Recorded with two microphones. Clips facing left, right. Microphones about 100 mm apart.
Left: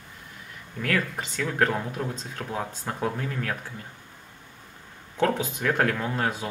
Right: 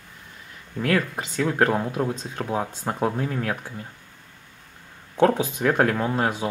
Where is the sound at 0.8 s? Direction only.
30° right (ahead or behind).